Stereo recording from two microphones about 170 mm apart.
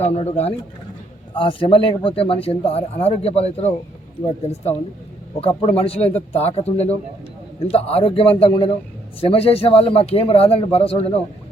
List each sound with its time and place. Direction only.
0.0 s a man's voice: 40° left (ahead or behind)
5.4 s a man's voice: 30° left (ahead or behind)